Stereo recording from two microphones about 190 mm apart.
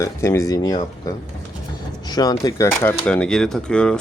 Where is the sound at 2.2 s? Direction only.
20° left (ahead or behind).